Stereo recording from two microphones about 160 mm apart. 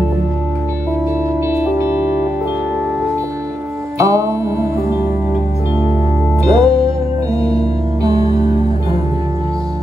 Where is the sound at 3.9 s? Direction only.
20° right (ahead or behind).